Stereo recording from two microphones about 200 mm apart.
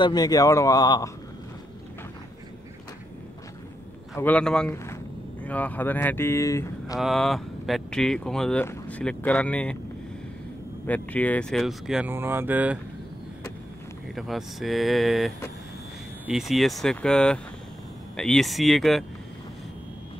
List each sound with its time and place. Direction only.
0.0 s speech: 20° left (ahead or behind)
4.2 s speech: 5° left (ahead or behind)
7.0 s speech: centre (ahead or behind)
10.9 s speech: 5° left (ahead or behind); by 12.7 s 10° right (ahead or behind)
14.1 s speech: centre (ahead or behind)